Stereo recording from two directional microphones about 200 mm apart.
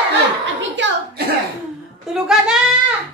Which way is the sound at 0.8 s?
65° right (ahead or behind).